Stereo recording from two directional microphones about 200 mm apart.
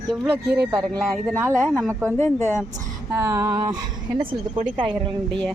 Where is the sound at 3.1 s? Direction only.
15° right (ahead or behind).